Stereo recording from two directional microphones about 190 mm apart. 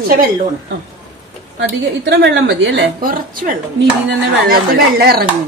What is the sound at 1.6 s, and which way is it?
A woman's voice, 65° right (ahead or behind).